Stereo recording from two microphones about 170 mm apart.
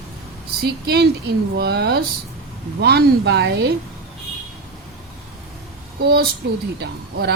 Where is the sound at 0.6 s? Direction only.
70° right (ahead or behind).